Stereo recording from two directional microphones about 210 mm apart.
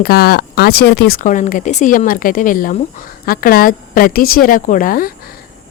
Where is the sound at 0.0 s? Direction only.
45° left (ahead or behind).